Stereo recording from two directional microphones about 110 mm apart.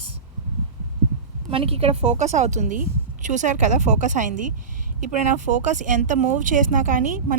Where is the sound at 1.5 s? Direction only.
60° right (ahead or behind); by 4.0 s 90° right.